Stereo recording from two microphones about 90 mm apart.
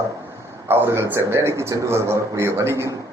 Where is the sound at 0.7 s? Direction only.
25° right (ahead or behind).